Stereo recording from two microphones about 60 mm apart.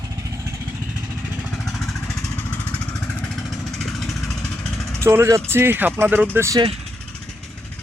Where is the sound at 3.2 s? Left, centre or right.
Centre.